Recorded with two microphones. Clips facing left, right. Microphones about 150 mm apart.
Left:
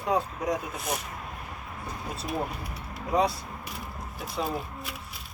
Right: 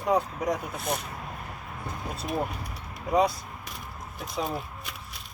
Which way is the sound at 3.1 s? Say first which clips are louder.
Right 2 dB; centre (ahead or behind).